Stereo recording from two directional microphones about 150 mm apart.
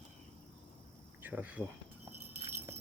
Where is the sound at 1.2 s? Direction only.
10° right (ahead or behind).